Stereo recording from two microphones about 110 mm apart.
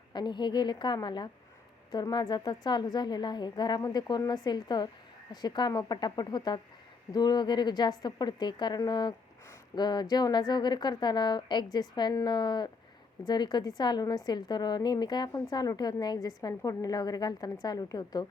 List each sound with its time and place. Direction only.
0.1 s a woman's voice: 40° left (ahead or behind)